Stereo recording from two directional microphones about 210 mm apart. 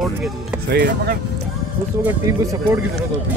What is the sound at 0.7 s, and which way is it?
Speech, 50° right (ahead or behind).